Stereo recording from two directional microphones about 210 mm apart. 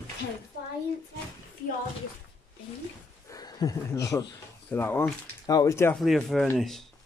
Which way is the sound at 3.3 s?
15° left (ahead or behind).